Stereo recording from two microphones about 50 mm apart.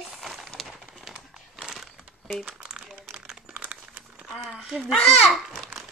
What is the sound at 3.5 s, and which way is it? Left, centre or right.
Crumpling, right.